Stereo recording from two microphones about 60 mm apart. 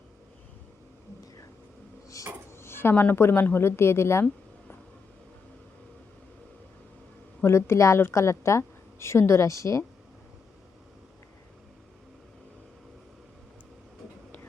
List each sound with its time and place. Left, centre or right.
2.2 s a sound: left
2.6 s a woman's voice: left
7.4 s a woman's voice: left